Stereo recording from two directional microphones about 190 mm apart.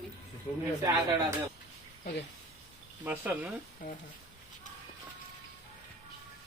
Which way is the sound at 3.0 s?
10° right (ahead or behind).